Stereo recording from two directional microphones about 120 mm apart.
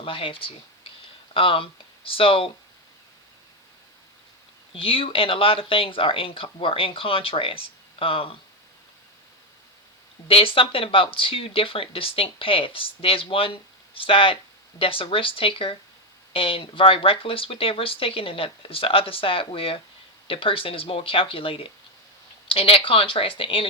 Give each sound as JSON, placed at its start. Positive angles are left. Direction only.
{"t": 0.0, "sound": "speech", "side_deg": 50}
{"t": 4.7, "sound": "speech", "side_deg": 50}
{"t": 10.2, "sound": "speech", "side_deg": 50}